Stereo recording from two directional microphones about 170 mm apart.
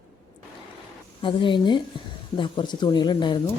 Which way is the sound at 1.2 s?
30° left (ahead or behind).